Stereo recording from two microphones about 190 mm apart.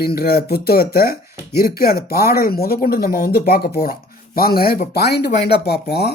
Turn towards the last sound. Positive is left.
turn(degrees=55)  # may be behind; listen again after turning